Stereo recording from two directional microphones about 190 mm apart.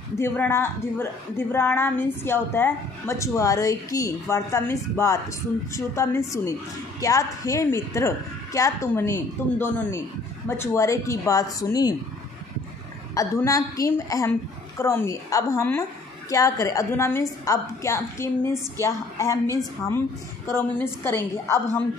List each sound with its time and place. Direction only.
0.2 s a woman's voice: 15° left (ahead or behind)
13.1 s a woman's voice: 15° left (ahead or behind)
20.4 s a woman's voice: 10° left (ahead or behind)